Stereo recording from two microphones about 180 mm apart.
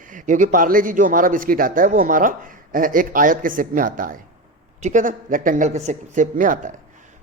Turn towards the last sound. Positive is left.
turn(degrees=-50)  # may be behind; listen again after turning